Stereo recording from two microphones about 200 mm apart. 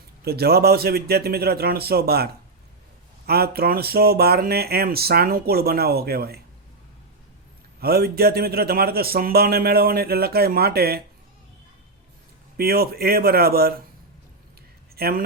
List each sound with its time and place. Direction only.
0.3 s a man's voice: 50° right (ahead or behind)
7.8 s a man's voice: 50° right (ahead or behind)
12.5 s a man's voice: 50° right (ahead or behind)
14.9 s speech: 50° right (ahead or behind)